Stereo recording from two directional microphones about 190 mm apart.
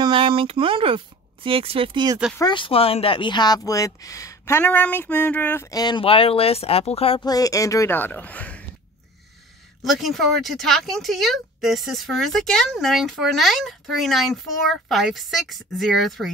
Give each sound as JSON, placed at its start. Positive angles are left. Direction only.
{"t": 0.0, "sound": "speech", "side_deg": -25}
{"t": 2.3, "sound": "speech", "side_deg": 25}
{"t": 9.8, "sound": "speech", "side_deg": 0}